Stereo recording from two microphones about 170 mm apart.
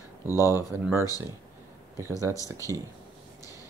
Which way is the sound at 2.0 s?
15° right (ahead or behind).